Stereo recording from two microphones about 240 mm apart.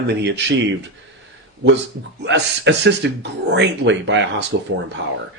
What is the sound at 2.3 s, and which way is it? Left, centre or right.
A man's voice, right.